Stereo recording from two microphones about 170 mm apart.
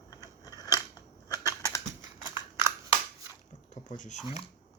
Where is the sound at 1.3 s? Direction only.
20° left (ahead or behind).